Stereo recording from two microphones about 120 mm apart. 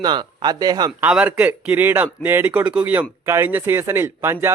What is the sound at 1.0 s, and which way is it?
A man's voice, 10° right (ahead or behind).